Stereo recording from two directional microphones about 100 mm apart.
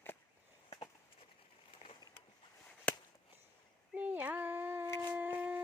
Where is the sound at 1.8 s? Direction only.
90° left.